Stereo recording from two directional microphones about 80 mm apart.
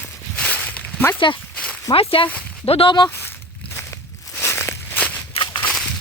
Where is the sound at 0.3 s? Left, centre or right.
Centre.